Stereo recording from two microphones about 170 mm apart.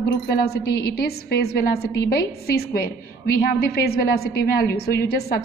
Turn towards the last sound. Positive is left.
turn(degrees=70)  # may be behind; listen again after turning